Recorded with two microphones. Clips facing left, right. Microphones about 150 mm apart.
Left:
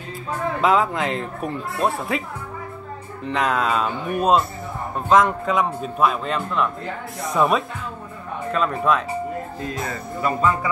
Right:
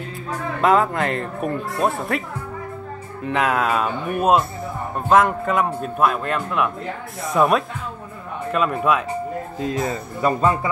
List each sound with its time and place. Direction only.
0.6 s speech: centre (ahead or behind)
3.3 s speech: 5° right (ahead or behind)
10.2 s speech: 35° right (ahead or behind)